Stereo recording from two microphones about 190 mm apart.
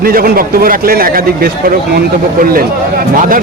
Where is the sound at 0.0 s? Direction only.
50° right (ahead or behind).